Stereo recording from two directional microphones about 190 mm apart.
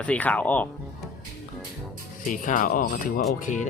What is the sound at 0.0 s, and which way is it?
Carnatic music, 5° left (ahead or behind).